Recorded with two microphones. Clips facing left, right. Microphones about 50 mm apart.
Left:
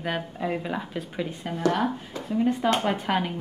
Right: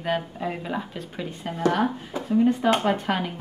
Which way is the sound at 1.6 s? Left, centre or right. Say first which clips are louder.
Right 2 dB; centre.